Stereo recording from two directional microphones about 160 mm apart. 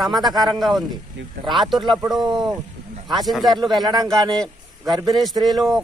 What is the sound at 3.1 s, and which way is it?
Speech, centre (ahead or behind).